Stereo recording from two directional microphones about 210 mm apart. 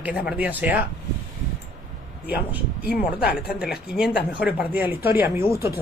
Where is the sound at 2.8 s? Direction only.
50° left (ahead or behind).